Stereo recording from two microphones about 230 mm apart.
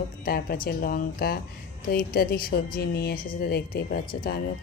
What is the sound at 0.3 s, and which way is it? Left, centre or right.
Speech, left.